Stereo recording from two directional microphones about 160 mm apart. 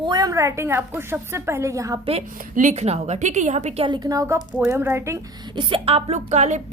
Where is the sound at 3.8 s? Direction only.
25° right (ahead or behind).